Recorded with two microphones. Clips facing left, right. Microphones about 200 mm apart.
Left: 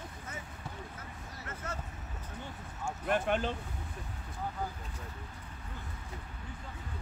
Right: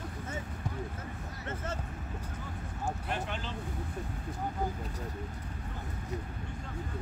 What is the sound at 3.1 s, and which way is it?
Speech, 55° left (ahead or behind).